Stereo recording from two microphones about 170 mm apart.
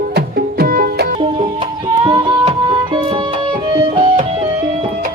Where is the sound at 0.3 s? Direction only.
60° right (ahead or behind).